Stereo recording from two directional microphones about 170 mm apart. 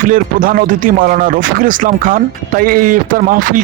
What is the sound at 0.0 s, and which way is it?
Speech, 55° right (ahead or behind).